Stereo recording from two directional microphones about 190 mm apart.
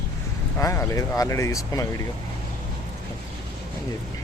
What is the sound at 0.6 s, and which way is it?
Speech, 15° left (ahead or behind).